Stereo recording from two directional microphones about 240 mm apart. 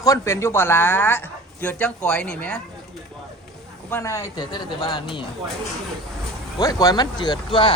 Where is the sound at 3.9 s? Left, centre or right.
Centre.